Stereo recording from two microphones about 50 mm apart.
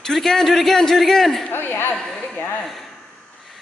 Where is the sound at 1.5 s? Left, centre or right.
Left.